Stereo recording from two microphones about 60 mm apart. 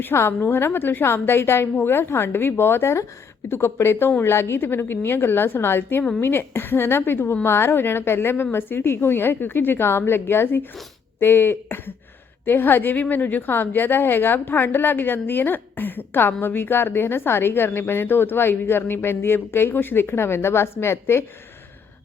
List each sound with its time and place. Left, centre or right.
0.0 s a woman's voice: left